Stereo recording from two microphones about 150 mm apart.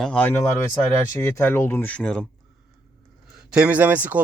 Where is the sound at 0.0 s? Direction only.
10° left (ahead or behind).